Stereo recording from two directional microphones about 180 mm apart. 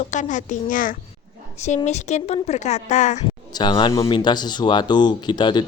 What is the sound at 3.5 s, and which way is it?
Speech, 25° left (ahead or behind).